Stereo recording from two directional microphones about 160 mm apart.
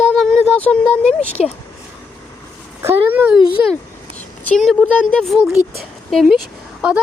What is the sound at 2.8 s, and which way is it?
Speech, 10° right (ahead or behind).